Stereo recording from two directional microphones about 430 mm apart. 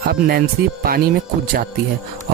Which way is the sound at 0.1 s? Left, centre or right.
Right.